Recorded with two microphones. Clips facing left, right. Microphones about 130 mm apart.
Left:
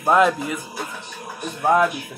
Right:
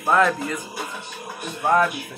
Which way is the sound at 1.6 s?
10° left (ahead or behind).